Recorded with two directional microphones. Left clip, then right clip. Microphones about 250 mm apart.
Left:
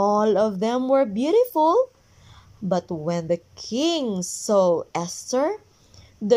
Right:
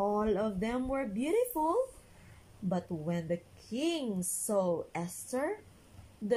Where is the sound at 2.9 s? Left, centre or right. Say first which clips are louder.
Left 10 dB; left.